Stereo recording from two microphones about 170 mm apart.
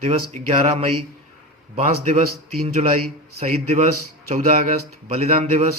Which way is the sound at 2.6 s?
35° right (ahead or behind).